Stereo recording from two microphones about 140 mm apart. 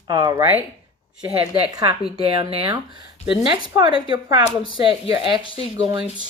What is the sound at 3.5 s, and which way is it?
Speech, 30° right (ahead or behind).